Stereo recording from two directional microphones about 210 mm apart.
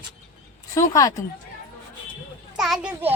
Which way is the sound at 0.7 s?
15° left (ahead or behind).